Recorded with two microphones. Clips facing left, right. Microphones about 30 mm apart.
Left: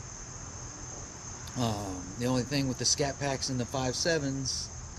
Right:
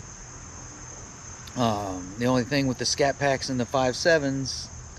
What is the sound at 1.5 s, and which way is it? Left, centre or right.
Speech, right.